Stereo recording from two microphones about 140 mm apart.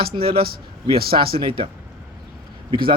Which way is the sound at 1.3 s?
35° right (ahead or behind).